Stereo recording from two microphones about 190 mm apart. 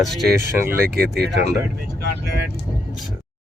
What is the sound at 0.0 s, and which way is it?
Speech, centre (ahead or behind).